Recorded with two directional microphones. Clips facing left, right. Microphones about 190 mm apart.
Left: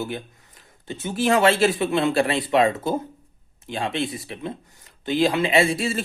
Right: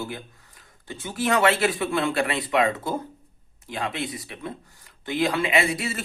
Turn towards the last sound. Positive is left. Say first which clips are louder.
# left 4 dB
turn(degrees=30)  # may be behind; listen again after turning